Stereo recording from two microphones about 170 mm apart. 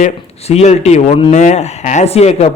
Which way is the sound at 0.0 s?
40° left (ahead or behind).